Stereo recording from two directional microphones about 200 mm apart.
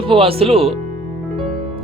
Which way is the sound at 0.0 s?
25° right (ahead or behind).